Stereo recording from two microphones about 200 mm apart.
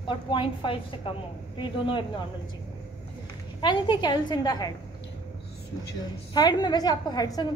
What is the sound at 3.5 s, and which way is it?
A woman's voice, 20° left (ahead or behind).